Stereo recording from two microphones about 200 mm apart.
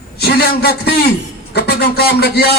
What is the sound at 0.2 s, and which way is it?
A man's voice, 55° left (ahead or behind).